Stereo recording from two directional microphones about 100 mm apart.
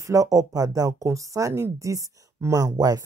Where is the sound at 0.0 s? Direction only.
35° right (ahead or behind).